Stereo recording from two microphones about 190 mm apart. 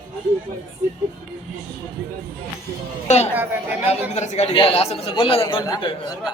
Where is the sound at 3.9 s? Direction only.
35° left (ahead or behind).